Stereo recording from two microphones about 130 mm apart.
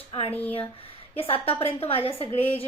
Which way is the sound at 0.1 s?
50° left (ahead or behind).